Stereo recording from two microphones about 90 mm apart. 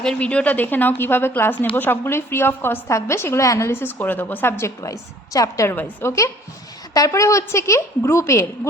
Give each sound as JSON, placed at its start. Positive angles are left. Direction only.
{"t": 0.0, "sound": "a woman's voice", "side_deg": 10}
{"t": 5.7, "sound": "a woman's voice", "side_deg": 25}